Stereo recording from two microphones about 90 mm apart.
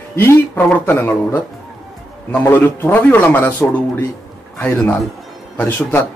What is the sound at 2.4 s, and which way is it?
A man's voice, 20° left (ahead or behind).